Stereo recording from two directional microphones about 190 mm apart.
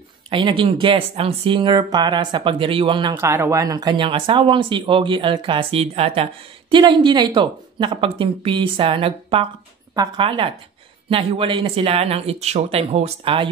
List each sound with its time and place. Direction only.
0.3 s speech: 25° right (ahead or behind)
3.2 s speech: 15° right (ahead or behind)